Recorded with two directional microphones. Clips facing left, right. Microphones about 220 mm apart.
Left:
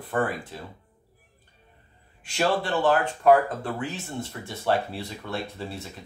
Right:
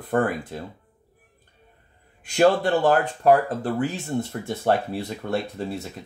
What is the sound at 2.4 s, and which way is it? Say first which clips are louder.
Speech: right 6 dB; 40° right (ahead or behind).